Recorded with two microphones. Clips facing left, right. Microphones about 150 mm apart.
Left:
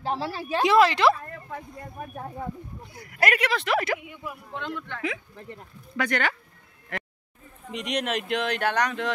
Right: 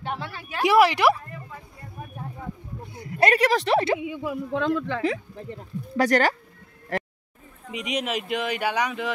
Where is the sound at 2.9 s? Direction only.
25° right (ahead or behind).